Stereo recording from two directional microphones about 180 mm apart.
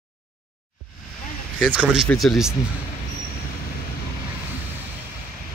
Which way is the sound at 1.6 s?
5° right (ahead or behind).